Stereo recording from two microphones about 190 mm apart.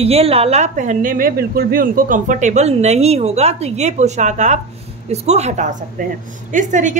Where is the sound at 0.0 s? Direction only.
30° right (ahead or behind).